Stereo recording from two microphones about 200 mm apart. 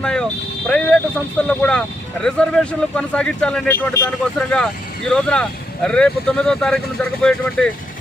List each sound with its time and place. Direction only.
0.0 s speech: 5° left (ahead or behind)